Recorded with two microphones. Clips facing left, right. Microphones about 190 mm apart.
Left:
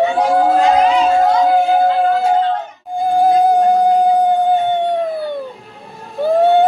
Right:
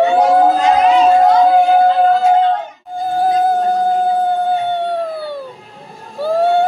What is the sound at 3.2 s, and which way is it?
Music, 15° left (ahead or behind).